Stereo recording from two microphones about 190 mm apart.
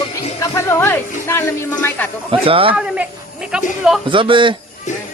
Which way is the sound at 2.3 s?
30° right (ahead or behind).